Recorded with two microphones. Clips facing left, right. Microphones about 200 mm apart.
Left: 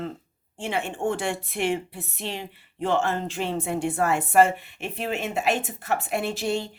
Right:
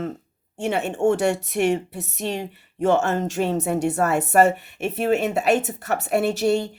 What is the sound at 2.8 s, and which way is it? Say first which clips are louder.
A woman's voice: right 5 dB; 45° right (ahead or behind).